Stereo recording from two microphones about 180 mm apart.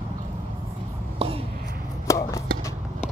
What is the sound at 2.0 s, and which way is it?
Chopping, 15° left (ahead or behind).